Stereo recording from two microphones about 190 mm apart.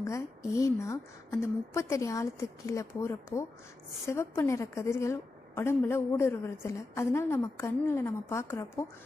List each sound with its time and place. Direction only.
0.0 s a woman's voice: 15° left (ahead or behind)